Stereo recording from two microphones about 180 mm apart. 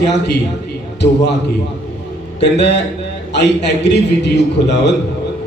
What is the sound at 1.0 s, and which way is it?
Speech, 70° left (ahead or behind).